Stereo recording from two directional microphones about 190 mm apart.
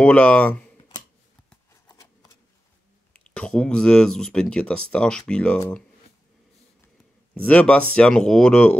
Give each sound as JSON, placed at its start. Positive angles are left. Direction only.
{"t": 0.0, "sound": "speech", "side_deg": 5}
{"t": 0.7, "sound": "a sound", "side_deg": 25}
{"t": 1.7, "sound": "shuffling cards", "side_deg": 15}
{"t": 3.1, "sound": "speech", "side_deg": 5}
{"t": 7.3, "sound": "speech", "side_deg": 5}